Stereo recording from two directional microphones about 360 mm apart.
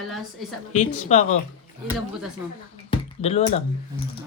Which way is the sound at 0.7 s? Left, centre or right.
Centre.